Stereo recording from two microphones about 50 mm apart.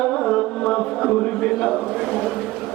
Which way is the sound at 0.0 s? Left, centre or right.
Centre.